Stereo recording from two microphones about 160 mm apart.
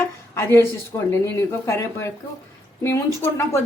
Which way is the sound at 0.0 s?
15° left (ahead or behind).